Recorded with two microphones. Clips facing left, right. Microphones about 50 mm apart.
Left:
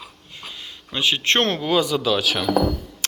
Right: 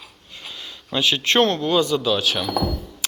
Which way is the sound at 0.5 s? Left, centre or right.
Left.